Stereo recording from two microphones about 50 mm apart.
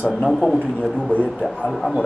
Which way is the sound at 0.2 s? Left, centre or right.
Centre.